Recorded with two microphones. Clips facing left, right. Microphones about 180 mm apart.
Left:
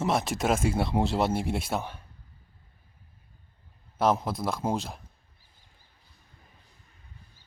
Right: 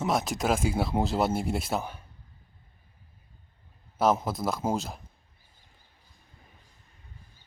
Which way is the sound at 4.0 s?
Centre (ahead or behind).